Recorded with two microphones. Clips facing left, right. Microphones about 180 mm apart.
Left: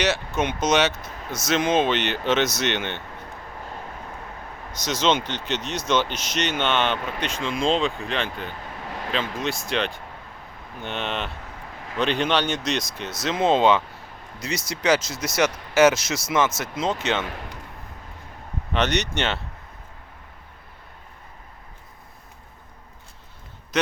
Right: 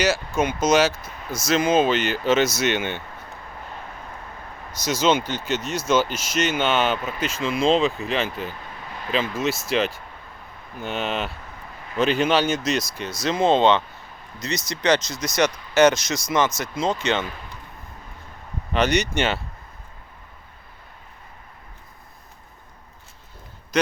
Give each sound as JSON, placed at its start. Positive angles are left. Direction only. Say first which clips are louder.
{"t": 0.3, "sound": "speech", "louder": "right 3 dB", "side_deg": 0}
{"t": 4.9, "sound": "speech", "louder": "right 2 dB", "side_deg": -5}
{"t": 17.2, "sound": "a man's voice", "louder": "left 2 dB", "side_deg": 70}
{"t": 18.7, "sound": "speech", "louder": "right 3 dB", "side_deg": 0}
{"t": 23.7, "sound": "speech", "louder": "right 2 dB", "side_deg": 5}